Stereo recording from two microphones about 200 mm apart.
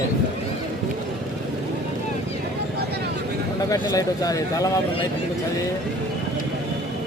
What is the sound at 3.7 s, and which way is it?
Speech, 15° left (ahead or behind).